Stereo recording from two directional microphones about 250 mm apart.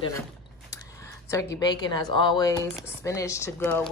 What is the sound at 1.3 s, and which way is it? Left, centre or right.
A woman's voice, centre.